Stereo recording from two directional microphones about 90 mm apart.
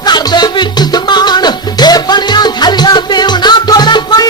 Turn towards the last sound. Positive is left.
turn(degrees=50)  # may be behind; listen again after turning